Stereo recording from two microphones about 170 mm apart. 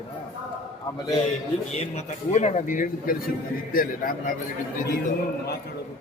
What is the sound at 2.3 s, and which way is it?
A man's voice, 45° left (ahead or behind).